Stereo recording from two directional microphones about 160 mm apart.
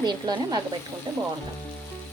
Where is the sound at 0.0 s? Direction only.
25° right (ahead or behind).